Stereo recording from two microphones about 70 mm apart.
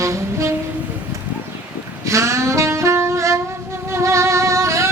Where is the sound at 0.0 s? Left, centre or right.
Right.